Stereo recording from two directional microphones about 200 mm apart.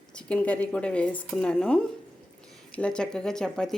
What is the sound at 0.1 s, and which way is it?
A woman's voice, 5° left (ahead or behind).